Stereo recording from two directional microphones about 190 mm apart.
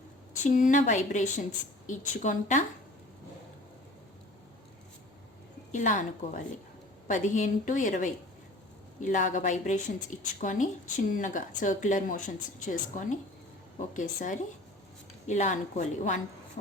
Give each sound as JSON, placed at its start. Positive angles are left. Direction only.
{"t": 0.4, "sound": "a woman's voice", "side_deg": 40}
{"t": 5.7, "sound": "a woman's voice", "side_deg": 40}